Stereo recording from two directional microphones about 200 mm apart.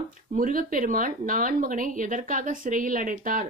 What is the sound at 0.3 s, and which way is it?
Speech, 45° right (ahead or behind).